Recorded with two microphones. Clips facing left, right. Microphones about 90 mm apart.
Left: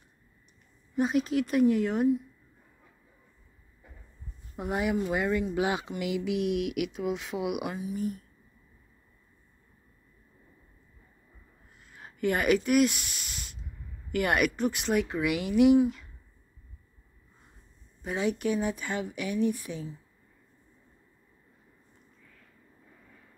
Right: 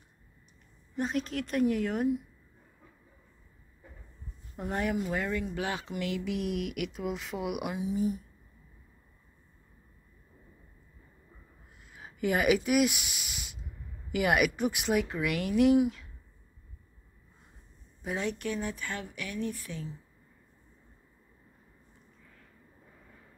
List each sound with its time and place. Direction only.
0.9 s speech: 10° left (ahead or behind)
4.6 s speech: 10° left (ahead or behind)
7.8 s speech: 20° right (ahead or behind)
11.8 s speech: 5° right (ahead or behind)
18.0 s speech: centre (ahead or behind)
18.4 s speech: 15° left (ahead or behind)